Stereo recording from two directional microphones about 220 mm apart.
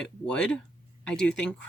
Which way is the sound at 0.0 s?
5° left (ahead or behind).